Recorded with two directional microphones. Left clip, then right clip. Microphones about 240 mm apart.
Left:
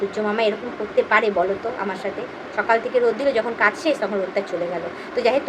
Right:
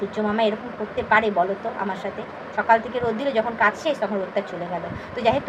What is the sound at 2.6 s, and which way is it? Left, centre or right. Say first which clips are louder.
A woman's voice: left 1 dB; centre.